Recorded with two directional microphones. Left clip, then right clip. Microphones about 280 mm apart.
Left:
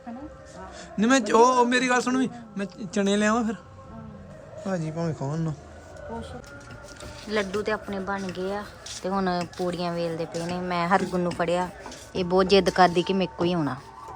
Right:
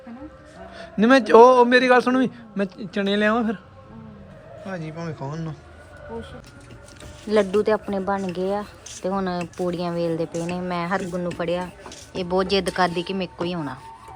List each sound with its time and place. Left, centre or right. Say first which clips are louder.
0.8 s a man's voice: right 6 dB; centre
4.6 s speech: left 3 dB; centre
7.3 s a man's voice: right 7 dB; centre